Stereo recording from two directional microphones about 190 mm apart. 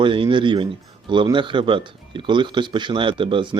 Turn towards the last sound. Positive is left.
turn(degrees=-25)  # may be behind; listen again after turning